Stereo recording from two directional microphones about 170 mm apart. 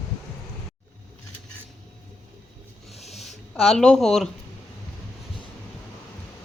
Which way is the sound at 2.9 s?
40° left (ahead or behind).